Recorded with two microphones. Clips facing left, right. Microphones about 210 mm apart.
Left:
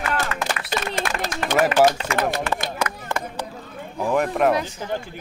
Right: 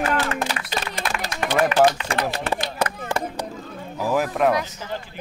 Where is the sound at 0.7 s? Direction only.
50° left (ahead or behind).